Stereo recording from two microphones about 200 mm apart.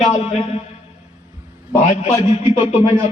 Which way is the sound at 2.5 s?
30° left (ahead or behind).